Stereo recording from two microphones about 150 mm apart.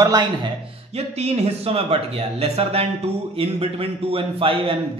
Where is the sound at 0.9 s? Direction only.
45° right (ahead or behind).